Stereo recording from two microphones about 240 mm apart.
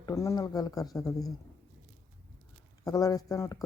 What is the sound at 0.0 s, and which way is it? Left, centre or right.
Speech, centre.